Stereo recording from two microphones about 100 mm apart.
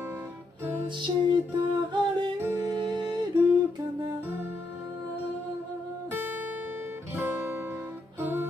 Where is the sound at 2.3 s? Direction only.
25° right (ahead or behind).